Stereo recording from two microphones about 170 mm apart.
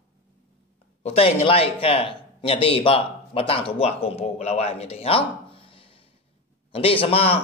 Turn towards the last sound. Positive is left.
turn(degrees=35)  # may be behind; listen again after turning